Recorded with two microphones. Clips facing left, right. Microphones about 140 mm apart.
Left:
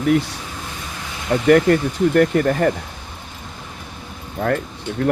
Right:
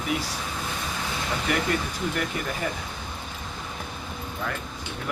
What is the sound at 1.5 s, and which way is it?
Speech, 65° left (ahead or behind).